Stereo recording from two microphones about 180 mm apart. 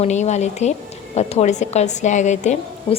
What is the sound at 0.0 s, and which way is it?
A woman's voice, 40° left (ahead or behind).